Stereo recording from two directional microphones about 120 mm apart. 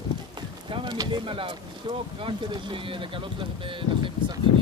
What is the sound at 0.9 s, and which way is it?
Speech, 45° right (ahead or behind).